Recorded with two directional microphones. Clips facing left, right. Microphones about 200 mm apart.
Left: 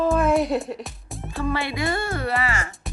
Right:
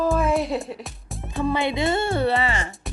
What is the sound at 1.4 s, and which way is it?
Speech, 20° right (ahead or behind).